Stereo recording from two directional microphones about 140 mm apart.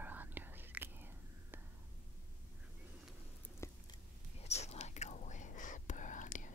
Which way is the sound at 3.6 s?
20° left (ahead or behind).